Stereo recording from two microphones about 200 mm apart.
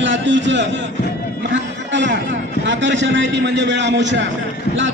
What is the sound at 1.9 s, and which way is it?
A man's voice, 65° right (ahead or behind).